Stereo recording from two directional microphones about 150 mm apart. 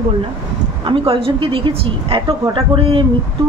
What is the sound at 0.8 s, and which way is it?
A woman's voice, 35° right (ahead or behind).